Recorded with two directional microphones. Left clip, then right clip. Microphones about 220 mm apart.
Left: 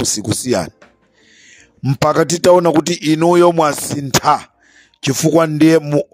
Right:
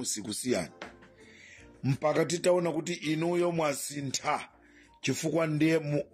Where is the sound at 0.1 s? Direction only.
50° left (ahead or behind).